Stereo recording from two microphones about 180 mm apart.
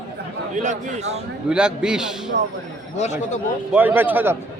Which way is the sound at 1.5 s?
5° right (ahead or behind).